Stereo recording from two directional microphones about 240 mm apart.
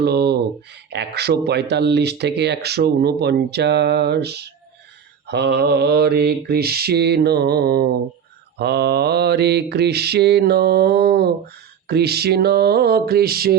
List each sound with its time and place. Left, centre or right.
0.0 s speech: right
5.3 s mantra: right
8.5 s speech: right
11.9 s mantra: right